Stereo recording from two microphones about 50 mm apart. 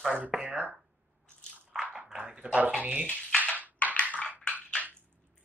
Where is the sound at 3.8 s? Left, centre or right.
Left.